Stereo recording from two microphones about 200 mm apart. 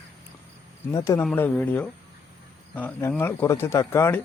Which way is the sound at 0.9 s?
15° left (ahead or behind).